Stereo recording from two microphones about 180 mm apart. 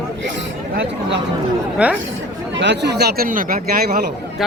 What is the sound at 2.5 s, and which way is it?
Speech, 75° right (ahead or behind).